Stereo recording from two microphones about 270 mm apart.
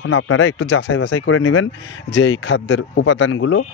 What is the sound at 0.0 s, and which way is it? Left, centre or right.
Speech, left.